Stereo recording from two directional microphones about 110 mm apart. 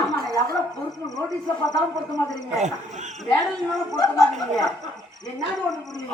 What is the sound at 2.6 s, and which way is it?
Speech, 90° right.